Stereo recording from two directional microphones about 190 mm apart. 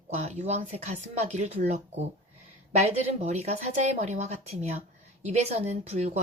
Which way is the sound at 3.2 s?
35° right (ahead or behind).